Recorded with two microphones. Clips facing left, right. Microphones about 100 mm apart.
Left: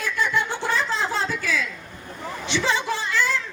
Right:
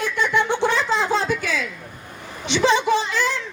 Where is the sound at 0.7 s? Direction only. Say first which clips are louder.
Right 4 dB; 20° right (ahead or behind).